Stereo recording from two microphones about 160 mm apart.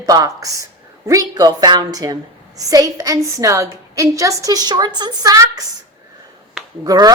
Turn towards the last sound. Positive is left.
turn(degrees=-25)  # may be behind; listen again after turning